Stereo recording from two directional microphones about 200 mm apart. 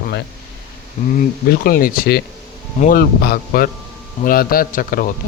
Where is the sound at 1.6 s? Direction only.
45° left (ahead or behind).